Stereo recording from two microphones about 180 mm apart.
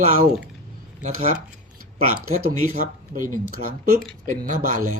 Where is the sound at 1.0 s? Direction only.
35° right (ahead or behind).